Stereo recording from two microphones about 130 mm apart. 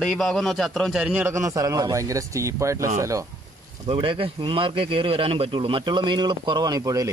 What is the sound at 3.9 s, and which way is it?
Speech, 45° right (ahead or behind).